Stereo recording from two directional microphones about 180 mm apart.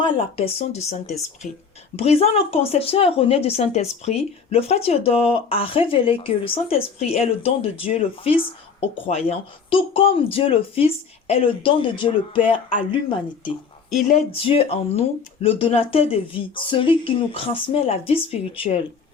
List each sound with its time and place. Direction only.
0.0 s a woman's voice: 30° left (ahead or behind)
9.6 s a woman's voice: 30° left (ahead or behind)
14.3 s a woman's voice: 30° left (ahead or behind)